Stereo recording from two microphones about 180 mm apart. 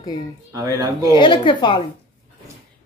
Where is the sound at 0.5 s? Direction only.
20° right (ahead or behind).